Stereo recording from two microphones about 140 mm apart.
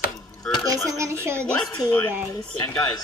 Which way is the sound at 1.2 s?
20° right (ahead or behind).